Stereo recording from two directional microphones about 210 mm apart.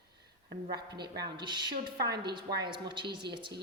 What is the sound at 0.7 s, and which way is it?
Speech, 20° right (ahead or behind).